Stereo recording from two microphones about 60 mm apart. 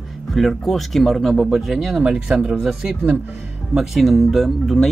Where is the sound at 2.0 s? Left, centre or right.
Centre.